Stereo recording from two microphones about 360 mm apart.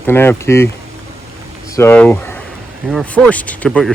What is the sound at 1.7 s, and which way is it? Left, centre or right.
Speech, centre.